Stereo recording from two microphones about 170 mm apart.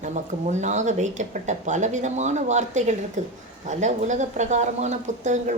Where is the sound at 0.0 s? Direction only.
45° right (ahead or behind).